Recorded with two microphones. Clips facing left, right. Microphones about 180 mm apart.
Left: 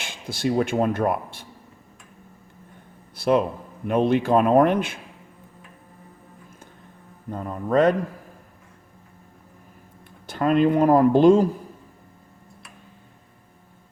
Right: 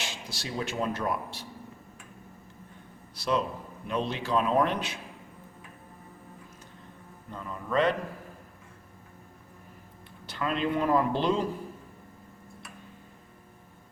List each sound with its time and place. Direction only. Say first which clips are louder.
0.0 s speech: left 11 dB; 55° left (ahead or behind)
3.2 s a sound: left 8 dB; 55° left (ahead or behind)
3.8 s speech: left 11 dB; 55° left (ahead or behind)
7.3 s speech: left 9 dB; 45° left (ahead or behind)
10.2 s speech: left 10 dB; 50° left (ahead or behind)